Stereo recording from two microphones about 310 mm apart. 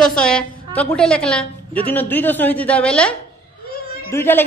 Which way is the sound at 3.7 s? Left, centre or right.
Left.